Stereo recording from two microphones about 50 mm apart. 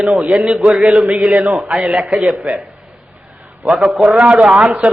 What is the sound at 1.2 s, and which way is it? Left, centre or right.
Speech, centre.